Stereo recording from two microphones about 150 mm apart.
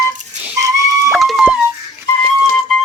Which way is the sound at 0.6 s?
20° right (ahead or behind).